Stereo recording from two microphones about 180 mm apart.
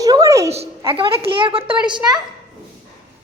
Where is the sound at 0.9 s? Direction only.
30° right (ahead or behind).